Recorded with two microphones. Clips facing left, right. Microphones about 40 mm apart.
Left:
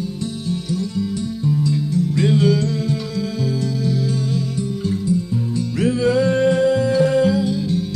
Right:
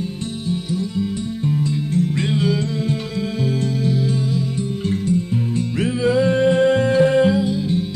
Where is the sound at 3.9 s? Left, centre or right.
Right.